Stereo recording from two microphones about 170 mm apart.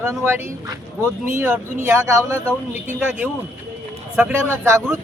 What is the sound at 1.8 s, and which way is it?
Speech, 15° right (ahead or behind).